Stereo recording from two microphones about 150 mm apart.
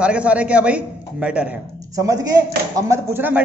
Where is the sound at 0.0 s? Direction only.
10° right (ahead or behind).